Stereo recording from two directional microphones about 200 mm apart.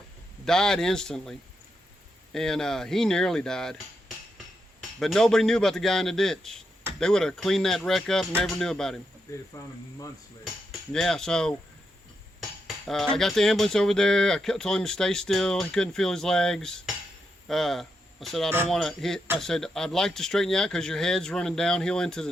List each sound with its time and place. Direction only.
0.4 s cutlery: 5° left (ahead or behind)
4.9 s cutlery: centre (ahead or behind)
9.6 s speech: 20° left (ahead or behind)
10.4 s cutlery: centre (ahead or behind)
17.5 s speech: centre (ahead or behind)
18.7 s cutlery: centre (ahead or behind)